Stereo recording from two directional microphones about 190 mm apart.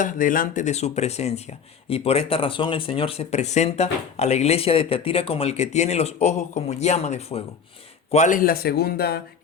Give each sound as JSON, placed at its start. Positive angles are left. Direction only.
{"t": 0.0, "sound": "a man's voice", "side_deg": 45}